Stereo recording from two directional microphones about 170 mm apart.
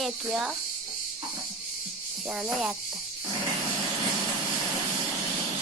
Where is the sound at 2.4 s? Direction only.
5° right (ahead or behind).